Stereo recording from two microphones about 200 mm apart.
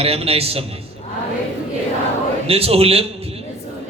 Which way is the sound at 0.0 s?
30° right (ahead or behind).